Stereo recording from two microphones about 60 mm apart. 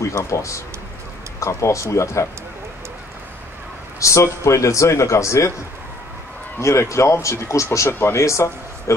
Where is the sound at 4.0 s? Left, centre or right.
Left.